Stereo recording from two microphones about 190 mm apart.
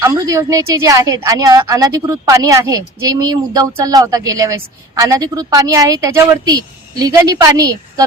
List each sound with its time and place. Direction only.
0.0 s a woman's voice: 15° right (ahead or behind)